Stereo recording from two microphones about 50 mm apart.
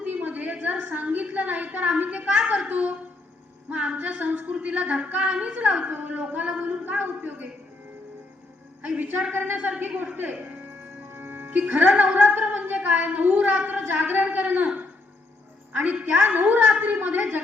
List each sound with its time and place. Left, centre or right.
0.0 s a sound: right
3.7 s a woman's voice: right
8.8 s a man's voice: right
11.1 s music: right
12.2 s a woman's voice: right
15.7 s a man's voice: right